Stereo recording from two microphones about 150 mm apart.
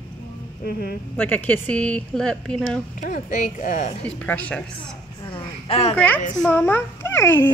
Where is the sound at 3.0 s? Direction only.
60° left (ahead or behind).